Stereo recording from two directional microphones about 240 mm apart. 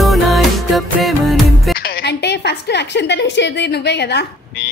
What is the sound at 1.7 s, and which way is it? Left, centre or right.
A woman's voice, left.